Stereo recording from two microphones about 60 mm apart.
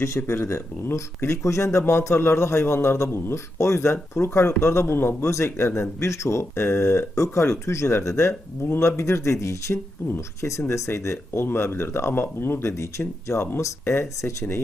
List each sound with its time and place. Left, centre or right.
0.2 s speech: left
3.3 s speech: left
11.4 s speech: left
12.7 s speech: left